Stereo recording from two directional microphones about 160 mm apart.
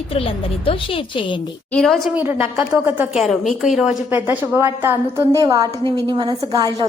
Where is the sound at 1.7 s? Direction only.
Centre (ahead or behind).